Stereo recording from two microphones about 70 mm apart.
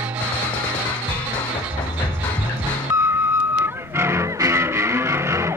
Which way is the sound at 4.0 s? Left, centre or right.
Right.